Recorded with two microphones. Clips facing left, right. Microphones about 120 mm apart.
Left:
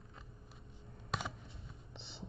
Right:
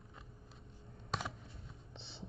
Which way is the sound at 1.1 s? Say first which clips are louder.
Even; centre (ahead or behind).